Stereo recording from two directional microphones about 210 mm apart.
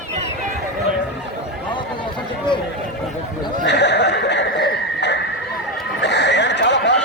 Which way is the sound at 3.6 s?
55° left (ahead or behind).